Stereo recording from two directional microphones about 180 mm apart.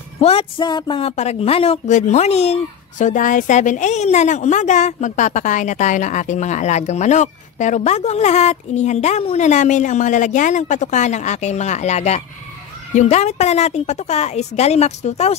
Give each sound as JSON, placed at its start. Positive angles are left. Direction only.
{"t": 0.2, "sound": "speech", "side_deg": 30}